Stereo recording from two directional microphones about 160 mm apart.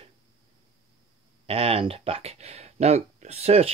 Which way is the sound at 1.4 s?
35° right (ahead or behind).